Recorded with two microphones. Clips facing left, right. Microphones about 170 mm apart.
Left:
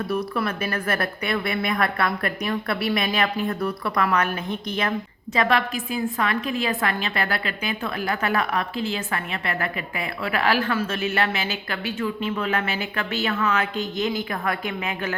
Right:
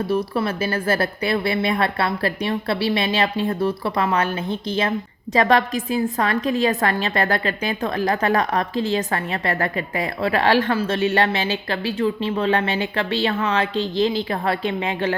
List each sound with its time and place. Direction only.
0.1 s speech: 30° right (ahead or behind)